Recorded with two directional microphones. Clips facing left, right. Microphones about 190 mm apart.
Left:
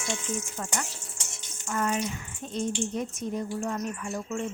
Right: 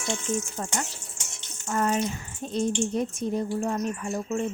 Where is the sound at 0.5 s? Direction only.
35° right (ahead or behind).